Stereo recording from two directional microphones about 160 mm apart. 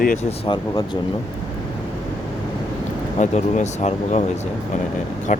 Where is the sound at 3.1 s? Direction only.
50° left (ahead or behind).